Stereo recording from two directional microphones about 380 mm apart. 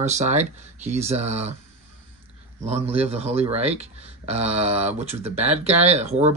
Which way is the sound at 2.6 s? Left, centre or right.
Centre.